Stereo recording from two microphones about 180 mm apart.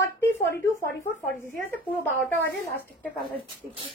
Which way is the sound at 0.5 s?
55° left (ahead or behind).